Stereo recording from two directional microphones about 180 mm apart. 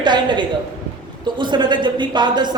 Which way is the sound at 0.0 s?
25° right (ahead or behind).